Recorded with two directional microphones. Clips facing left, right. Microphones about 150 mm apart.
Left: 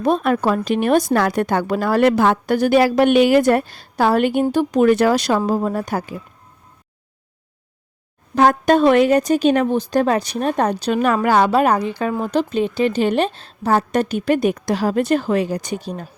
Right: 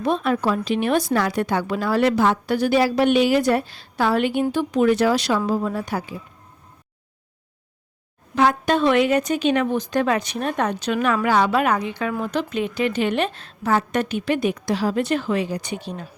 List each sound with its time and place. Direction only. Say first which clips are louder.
0.0 s a woman's voice: left 4 dB; 45° left (ahead or behind)
8.4 s a woman's voice: left 5 dB; 45° left (ahead or behind)